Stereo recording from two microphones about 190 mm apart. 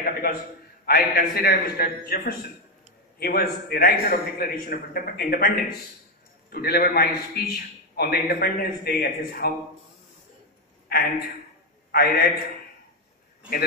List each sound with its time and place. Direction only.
0.0 s a sound: 50° left (ahead or behind)
0.8 s a man's voice: 55° left (ahead or behind)
6.5 s a man's voice: 55° left (ahead or behind)
10.9 s a man's voice: 55° left (ahead or behind)